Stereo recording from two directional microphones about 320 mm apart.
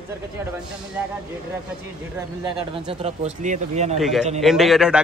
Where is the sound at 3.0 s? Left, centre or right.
Right.